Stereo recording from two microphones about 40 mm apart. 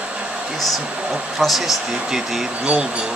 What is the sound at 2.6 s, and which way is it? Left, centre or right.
Speech, right.